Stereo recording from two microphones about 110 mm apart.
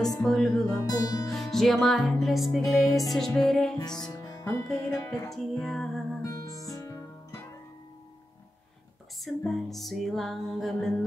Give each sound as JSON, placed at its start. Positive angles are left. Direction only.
{"t": 0.2, "sound": "music", "side_deg": 5}
{"t": 0.7, "sound": "music", "side_deg": 30}
{"t": 1.3, "sound": "music", "side_deg": 0}
{"t": 4.1, "sound": "music", "side_deg": 25}
{"t": 4.9, "sound": "speech", "side_deg": 30}
{"t": 5.3, "sound": "music", "side_deg": 5}
{"t": 6.2, "sound": "music", "side_deg": 30}
{"t": 9.2, "sound": "music", "side_deg": 0}